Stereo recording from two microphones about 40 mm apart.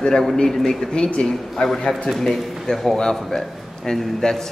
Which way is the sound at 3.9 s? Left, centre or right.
Centre.